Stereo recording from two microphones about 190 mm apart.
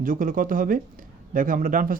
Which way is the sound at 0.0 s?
45° right (ahead or behind).